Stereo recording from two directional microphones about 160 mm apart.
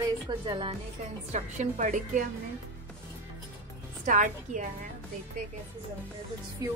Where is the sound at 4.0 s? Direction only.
50° right (ahead or behind).